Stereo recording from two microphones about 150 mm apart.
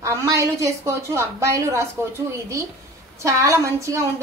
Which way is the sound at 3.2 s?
20° right (ahead or behind).